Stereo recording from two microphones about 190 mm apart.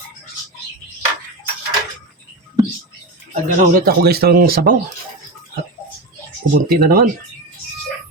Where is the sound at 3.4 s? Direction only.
45° right (ahead or behind).